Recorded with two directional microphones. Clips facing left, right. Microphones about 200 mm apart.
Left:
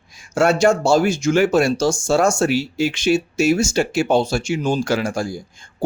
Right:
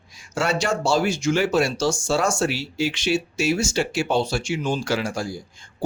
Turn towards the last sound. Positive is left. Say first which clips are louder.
# left 4 dB
turn(degrees=45)  # may be behind; listen again after turning